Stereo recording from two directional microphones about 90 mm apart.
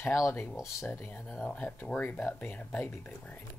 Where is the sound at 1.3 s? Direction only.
10° left (ahead or behind).